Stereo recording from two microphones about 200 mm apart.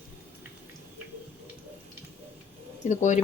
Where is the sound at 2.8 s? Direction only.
35° left (ahead or behind).